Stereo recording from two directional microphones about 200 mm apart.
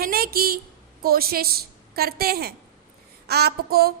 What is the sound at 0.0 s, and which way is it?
A woman's voice, 50° right (ahead or behind).